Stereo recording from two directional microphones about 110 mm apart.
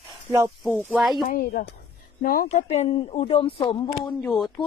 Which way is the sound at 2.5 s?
85° left.